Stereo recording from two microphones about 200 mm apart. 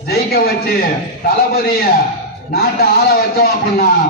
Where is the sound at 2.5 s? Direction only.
50° left (ahead or behind).